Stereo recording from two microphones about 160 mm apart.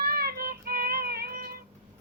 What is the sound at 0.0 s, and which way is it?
Child singing, 75° right (ahead or behind).